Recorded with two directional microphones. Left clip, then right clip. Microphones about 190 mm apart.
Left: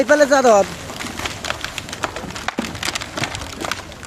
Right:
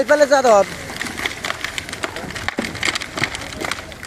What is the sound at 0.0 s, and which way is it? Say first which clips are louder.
Speech: even; 25° left (ahead or behind).